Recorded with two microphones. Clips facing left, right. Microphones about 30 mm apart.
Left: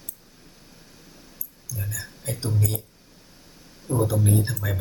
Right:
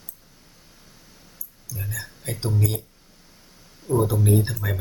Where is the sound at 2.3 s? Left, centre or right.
Centre.